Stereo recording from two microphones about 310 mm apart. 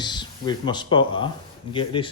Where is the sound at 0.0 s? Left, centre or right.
Centre.